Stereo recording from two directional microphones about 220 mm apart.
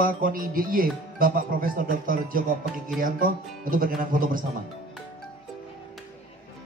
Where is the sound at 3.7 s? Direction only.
40° right (ahead or behind).